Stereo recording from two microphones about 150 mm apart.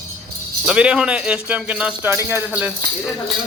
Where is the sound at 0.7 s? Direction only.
5° right (ahead or behind).